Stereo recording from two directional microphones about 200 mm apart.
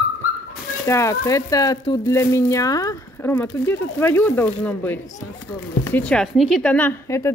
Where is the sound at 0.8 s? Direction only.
15° left (ahead or behind).